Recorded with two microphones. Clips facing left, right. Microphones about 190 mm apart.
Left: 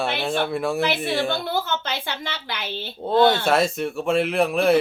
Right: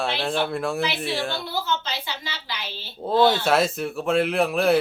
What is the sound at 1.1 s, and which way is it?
A woman's voice, 55° left (ahead or behind).